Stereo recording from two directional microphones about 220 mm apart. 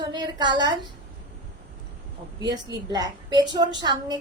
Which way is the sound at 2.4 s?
20° right (ahead or behind).